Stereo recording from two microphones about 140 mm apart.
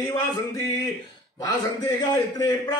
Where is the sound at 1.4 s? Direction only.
25° left (ahead or behind).